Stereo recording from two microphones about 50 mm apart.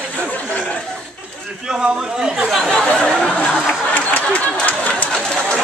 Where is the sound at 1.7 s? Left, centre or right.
Centre.